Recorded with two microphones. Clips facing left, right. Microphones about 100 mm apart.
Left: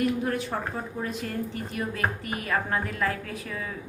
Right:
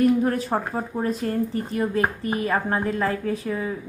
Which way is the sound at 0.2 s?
35° right (ahead or behind).